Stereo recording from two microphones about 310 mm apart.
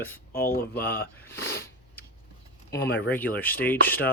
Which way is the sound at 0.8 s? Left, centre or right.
Centre.